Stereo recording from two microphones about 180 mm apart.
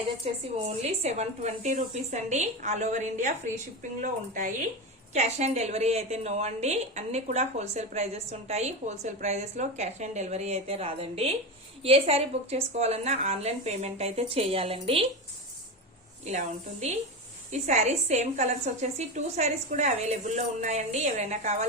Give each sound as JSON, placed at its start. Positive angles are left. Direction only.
{"t": 0.2, "sound": "a woman's voice", "side_deg": -35}
{"t": 16.2, "sound": "a woman's voice", "side_deg": -40}